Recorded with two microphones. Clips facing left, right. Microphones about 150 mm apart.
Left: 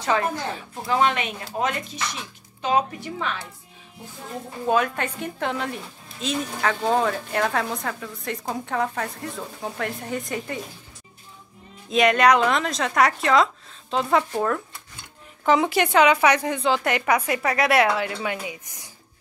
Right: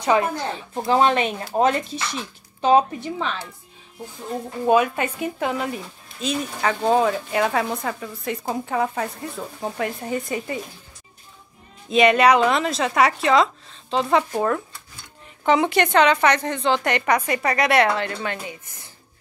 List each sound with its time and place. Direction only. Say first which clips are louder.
0.0 s speech: right 4 dB; 15° right (ahead or behind)
0.8 s a woman's voice: right 4 dB; 35° right (ahead or behind)
4.6 s speech: right 4 dB; 10° right (ahead or behind)
11.9 s speech: right 2 dB; centre (ahead or behind)